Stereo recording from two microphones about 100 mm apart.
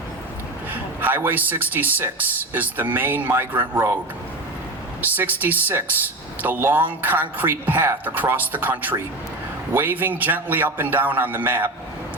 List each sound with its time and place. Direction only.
0.7 s a man's voice: 20° right (ahead or behind)
4.9 s a man's voice: 20° right (ahead or behind)